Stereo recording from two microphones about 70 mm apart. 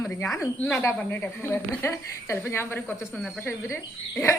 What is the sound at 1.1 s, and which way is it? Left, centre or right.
A woman's voice, left.